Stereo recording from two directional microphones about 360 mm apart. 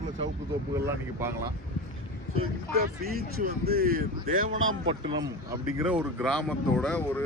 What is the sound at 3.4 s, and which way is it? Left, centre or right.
Speech, right.